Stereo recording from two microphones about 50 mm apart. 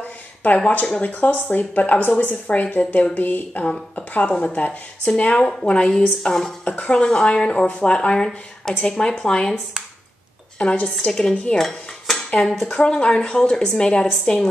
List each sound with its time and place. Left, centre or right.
0.4 s a woman's voice: left; by 6.5 s centre
6.6 s a woman's voice: left
10.6 s a woman's voice: left
11.1 s speech: centre